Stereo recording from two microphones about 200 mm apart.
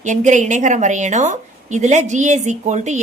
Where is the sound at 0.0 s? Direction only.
35° right (ahead or behind).